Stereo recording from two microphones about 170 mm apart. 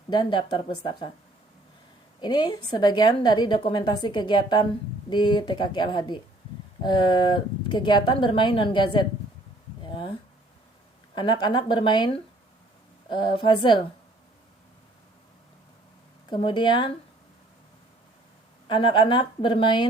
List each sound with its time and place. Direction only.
0.1 s a woman's voice: 25° left (ahead or behind)
2.2 s a woman's voice: 25° left (ahead or behind)
9.8 s a sound: 30° left (ahead or behind)
11.1 s a woman's voice: 25° left (ahead or behind)
16.3 s a woman's voice: 30° left (ahead or behind)
18.7 s a woman's voice: 30° left (ahead or behind)